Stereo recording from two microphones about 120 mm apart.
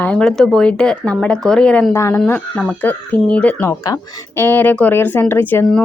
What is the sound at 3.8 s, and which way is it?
Speech, 30° left (ahead or behind).